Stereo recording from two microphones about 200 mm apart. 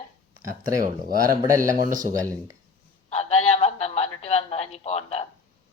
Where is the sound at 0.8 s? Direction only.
45° right (ahead or behind).